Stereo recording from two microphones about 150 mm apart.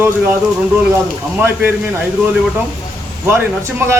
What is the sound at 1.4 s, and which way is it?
Speech, 10° right (ahead or behind).